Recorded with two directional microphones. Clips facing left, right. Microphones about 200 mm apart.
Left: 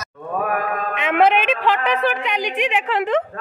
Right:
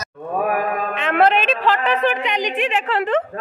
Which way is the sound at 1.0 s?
10° left (ahead or behind).